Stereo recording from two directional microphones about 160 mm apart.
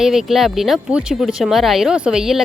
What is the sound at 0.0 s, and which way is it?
Speech, 5° right (ahead or behind).